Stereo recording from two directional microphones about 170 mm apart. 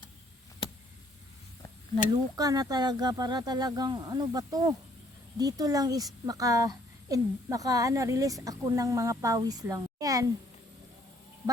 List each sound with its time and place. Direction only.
2.3 s a woman's voice: 20° right (ahead or behind)